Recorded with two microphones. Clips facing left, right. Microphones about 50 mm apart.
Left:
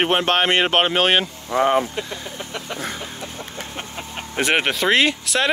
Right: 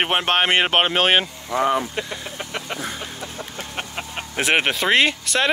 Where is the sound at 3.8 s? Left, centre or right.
Right.